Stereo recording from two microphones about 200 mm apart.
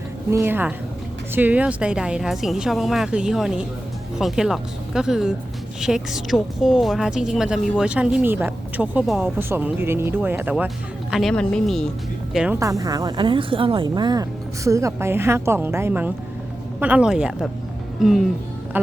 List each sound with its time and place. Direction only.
0.3 s speech: 10° right (ahead or behind)
12.5 s speech: 15° right (ahead or behind); by 18.3 s centre (ahead or behind)